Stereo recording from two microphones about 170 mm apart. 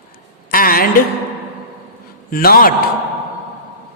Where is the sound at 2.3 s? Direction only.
60° left (ahead or behind).